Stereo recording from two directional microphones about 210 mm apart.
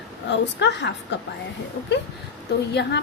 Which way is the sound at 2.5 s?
50° left (ahead or behind).